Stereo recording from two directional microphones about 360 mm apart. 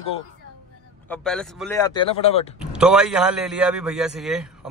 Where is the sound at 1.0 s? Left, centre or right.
Centre.